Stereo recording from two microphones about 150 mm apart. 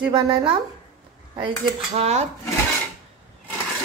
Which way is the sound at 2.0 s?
45° right (ahead or behind).